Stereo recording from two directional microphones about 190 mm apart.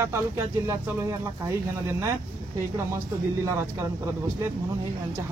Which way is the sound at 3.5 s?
15° right (ahead or behind).